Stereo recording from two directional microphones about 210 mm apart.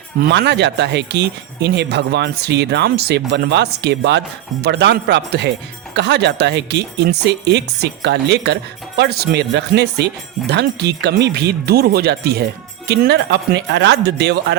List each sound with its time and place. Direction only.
0.2 s speech: 55° right (ahead or behind)